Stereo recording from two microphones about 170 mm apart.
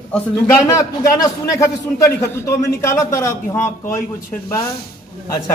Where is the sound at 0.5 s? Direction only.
20° left (ahead or behind).